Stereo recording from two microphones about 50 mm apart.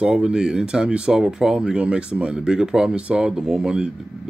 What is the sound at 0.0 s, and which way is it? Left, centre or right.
Speech, centre.